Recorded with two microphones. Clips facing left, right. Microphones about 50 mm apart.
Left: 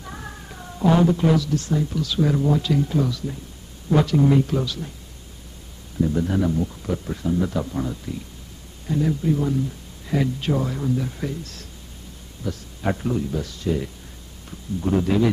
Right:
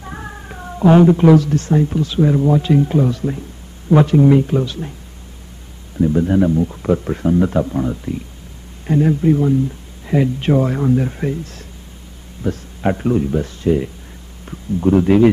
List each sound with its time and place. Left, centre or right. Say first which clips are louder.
0.0 s cat: right 5 dB; right
0.7 s speech: right 7 dB; right
2.3 s speech: right 6 dB; centre
2.6 s speech: right 7 dB; right
5.9 s speech: right 7 dB; right
7.3 s speech: right 7 dB; right
8.8 s speech: right 8 dB; right
10.0 s speech: right 6 dB; right
12.8 s speech: right 7 dB; right